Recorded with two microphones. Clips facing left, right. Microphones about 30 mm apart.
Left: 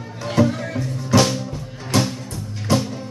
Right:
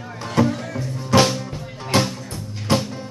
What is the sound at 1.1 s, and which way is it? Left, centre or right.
Music, centre.